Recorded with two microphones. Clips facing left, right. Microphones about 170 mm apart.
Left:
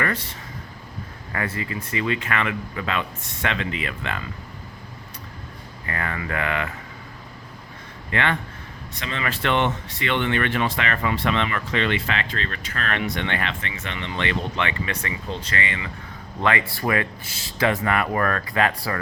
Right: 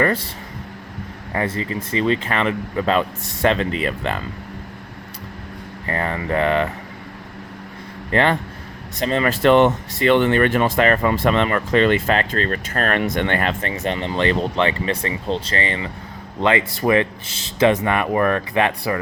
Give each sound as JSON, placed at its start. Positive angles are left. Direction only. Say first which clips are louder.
{"t": 1.3, "sound": "speech", "louder": "right 5 dB", "side_deg": -25}
{"t": 5.8, "sound": "speech", "louder": "right 5 dB", "side_deg": -30}
{"t": 8.1, "sound": "speech", "louder": "right 6 dB", "side_deg": -35}